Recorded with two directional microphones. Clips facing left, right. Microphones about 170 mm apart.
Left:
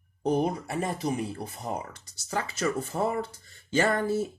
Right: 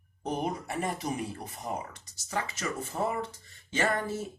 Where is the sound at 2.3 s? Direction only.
35° left (ahead or behind).